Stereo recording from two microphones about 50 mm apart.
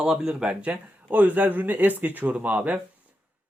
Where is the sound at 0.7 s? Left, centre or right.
Right.